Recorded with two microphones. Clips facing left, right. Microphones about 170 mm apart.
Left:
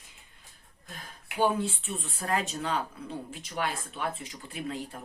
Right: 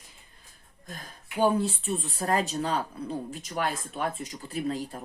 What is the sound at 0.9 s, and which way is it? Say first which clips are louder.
Speech: right 3 dB; 40° right (ahead or behind).